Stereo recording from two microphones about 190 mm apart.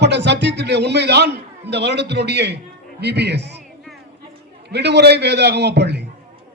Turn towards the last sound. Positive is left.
turn(degrees=-60)  # may be behind; listen again after turning